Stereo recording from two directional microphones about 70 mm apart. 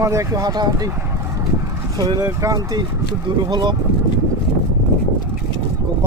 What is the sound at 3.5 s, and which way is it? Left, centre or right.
Speech, right.